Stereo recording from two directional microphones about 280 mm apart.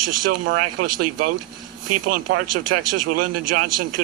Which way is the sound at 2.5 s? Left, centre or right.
Right.